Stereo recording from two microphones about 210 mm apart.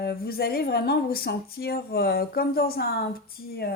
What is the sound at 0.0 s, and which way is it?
Speech, 45° left (ahead or behind).